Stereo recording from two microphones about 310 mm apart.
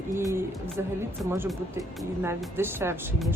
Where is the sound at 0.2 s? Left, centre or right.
Centre.